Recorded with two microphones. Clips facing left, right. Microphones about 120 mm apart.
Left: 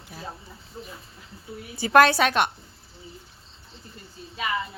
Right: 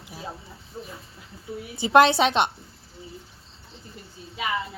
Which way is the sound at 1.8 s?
20° right (ahead or behind).